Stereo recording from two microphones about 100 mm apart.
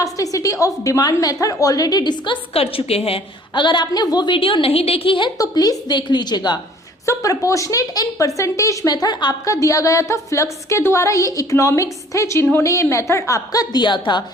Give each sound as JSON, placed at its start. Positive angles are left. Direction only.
{"t": 0.0, "sound": "a woman's voice", "side_deg": 35}
{"t": 2.5, "sound": "a woman's voice", "side_deg": 75}
{"t": 3.5, "sound": "a woman's voice", "side_deg": 50}
{"t": 4.3, "sound": "a woman's voice", "side_deg": 60}
{"t": 5.4, "sound": "a woman's voice", "side_deg": 40}
{"t": 7.0, "sound": "a woman's voice", "side_deg": 35}